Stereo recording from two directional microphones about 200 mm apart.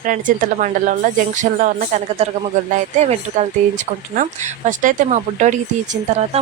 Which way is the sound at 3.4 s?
35° right (ahead or behind).